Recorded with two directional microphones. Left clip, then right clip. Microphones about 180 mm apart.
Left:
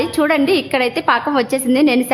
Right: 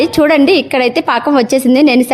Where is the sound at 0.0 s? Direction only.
35° right (ahead or behind).